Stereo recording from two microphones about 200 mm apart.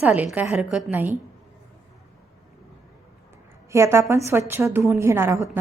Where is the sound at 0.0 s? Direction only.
5° right (ahead or behind).